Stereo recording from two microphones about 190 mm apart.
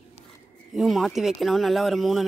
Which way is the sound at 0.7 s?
Centre (ahead or behind).